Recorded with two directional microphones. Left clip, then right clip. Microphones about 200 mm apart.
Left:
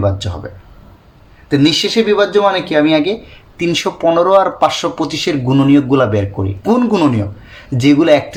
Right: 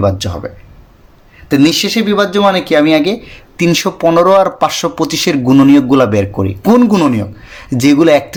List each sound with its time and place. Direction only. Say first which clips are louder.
0.0 s speech: right 4 dB; 35° right (ahead or behind)